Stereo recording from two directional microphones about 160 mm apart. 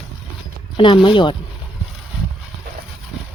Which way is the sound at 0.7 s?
30° left (ahead or behind).